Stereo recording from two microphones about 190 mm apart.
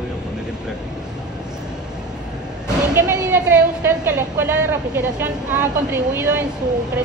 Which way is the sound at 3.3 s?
10° right (ahead or behind).